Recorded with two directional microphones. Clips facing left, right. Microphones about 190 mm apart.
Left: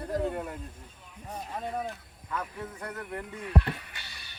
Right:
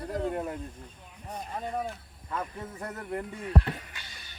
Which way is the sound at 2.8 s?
25° right (ahead or behind).